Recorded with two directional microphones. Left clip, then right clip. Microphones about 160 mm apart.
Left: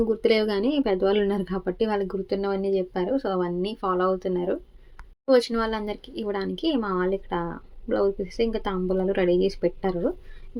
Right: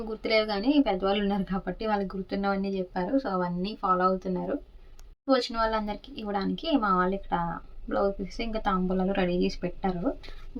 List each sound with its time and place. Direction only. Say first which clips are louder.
0.2 s speech: left 4 dB; 15° left (ahead or behind)